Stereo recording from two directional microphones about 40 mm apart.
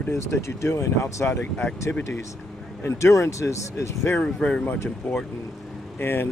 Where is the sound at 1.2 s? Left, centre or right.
Left.